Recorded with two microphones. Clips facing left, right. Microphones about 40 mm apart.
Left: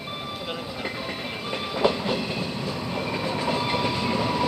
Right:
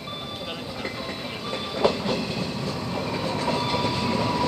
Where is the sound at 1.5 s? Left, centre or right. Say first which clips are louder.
Even; centre.